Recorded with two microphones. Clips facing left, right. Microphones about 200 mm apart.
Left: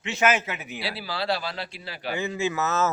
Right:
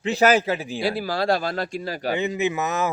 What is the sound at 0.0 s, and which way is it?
Speech, 35° right (ahead or behind).